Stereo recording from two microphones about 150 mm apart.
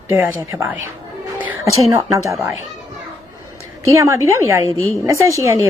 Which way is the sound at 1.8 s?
20° right (ahead or behind).